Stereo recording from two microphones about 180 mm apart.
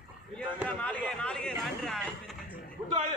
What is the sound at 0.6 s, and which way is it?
Speech, 5° left (ahead or behind).